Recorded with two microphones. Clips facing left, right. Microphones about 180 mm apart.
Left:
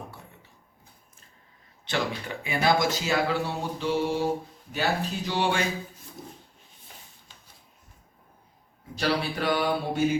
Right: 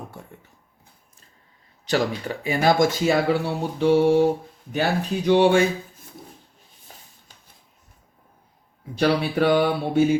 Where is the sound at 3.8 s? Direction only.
60° right (ahead or behind).